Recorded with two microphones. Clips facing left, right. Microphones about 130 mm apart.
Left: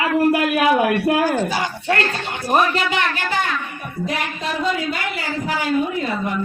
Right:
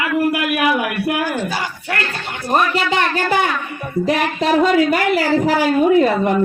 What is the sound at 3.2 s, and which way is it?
Speech, 55° right (ahead or behind).